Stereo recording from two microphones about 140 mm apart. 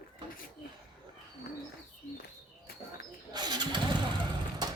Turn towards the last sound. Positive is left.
turn(degrees=-35)  # may be behind; listen again after turning